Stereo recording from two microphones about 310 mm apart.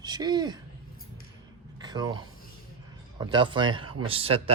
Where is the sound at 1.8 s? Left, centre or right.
Centre.